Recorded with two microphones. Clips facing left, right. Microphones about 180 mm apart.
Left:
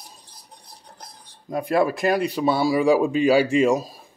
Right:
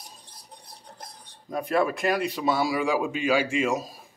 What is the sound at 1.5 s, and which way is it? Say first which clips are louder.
Speech: left 4 dB; 30° left (ahead or behind).